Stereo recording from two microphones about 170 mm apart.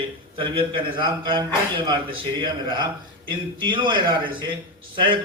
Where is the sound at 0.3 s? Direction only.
30° right (ahead or behind).